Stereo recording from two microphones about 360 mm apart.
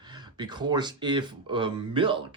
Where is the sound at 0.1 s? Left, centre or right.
Centre.